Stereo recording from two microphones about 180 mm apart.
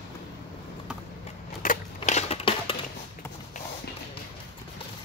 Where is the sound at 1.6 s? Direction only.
50° left (ahead or behind).